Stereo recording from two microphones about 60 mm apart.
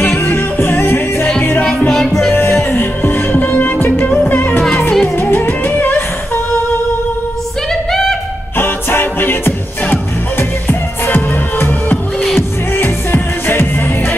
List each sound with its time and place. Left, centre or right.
0.0 s music: left
1.6 s music: left
1.9 s music: centre
2.3 s music: left
7.9 s music: centre
8.5 s music: left